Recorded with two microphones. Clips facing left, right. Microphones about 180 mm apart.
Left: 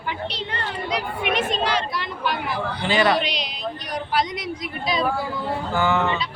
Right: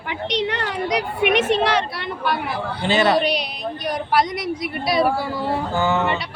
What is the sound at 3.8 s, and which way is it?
Speech, 60° right (ahead or behind).